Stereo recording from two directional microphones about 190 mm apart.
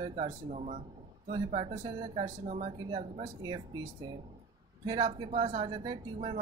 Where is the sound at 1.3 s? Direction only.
25° right (ahead or behind).